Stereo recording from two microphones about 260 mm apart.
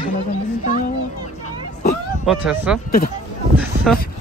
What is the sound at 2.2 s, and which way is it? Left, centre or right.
Speech, centre.